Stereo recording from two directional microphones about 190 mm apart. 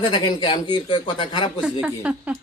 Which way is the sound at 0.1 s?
25° left (ahead or behind).